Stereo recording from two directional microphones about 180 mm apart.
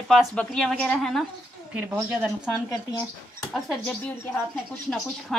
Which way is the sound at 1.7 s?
10° right (ahead or behind).